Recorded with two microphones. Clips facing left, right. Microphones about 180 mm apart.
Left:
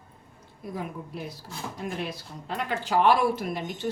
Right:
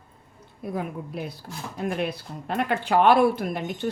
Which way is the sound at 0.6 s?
65° right (ahead or behind).